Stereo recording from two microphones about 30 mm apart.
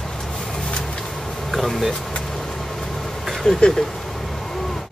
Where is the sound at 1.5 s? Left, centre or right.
Centre.